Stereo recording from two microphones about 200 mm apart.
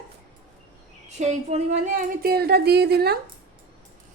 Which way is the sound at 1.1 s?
35° right (ahead or behind).